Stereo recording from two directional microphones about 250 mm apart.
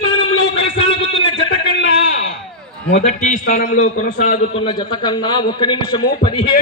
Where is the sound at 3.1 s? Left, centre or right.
Left.